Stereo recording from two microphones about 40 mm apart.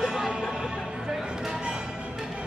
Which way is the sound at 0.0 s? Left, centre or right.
Centre.